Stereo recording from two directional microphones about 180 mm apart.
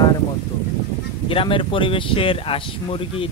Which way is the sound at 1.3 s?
30° left (ahead or behind).